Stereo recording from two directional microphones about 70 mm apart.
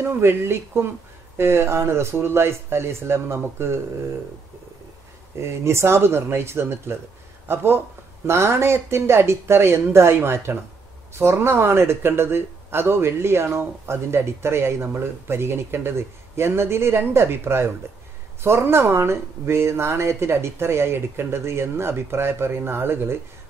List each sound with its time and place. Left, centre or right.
0.0 s speech: right
5.4 s speech: right